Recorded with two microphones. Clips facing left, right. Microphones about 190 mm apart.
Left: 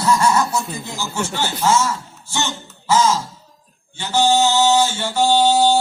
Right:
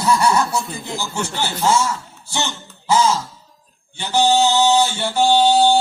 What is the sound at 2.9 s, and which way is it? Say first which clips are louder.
Music: even; 15° right (ahead or behind).